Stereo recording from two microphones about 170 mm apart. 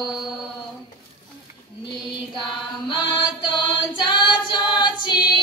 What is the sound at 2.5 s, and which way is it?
Mantra, 25° left (ahead or behind).